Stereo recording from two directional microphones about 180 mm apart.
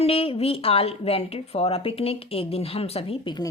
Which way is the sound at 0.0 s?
30° left (ahead or behind).